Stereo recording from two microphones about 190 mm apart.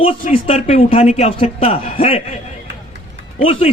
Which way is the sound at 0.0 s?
30° left (ahead or behind).